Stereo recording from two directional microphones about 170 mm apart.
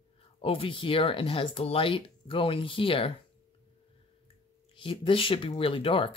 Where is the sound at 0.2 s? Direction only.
30° left (ahead or behind).